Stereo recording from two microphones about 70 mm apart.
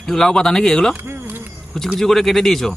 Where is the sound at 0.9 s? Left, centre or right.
Right.